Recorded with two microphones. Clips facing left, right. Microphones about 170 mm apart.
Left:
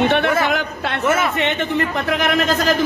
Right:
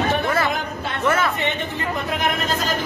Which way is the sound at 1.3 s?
85° left.